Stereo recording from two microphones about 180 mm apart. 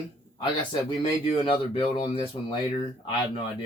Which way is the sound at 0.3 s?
25° left (ahead or behind).